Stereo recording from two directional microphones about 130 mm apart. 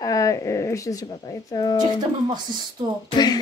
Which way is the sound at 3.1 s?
30° left (ahead or behind).